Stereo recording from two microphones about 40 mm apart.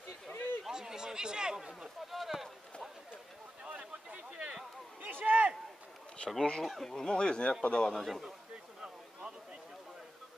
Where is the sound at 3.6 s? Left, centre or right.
Right.